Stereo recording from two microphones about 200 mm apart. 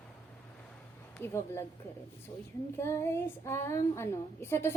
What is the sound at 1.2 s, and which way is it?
Speech, 10° left (ahead or behind).